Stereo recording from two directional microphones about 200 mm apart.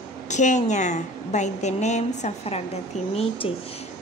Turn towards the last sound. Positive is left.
turn(degrees=30)  # may be behind; listen again after turning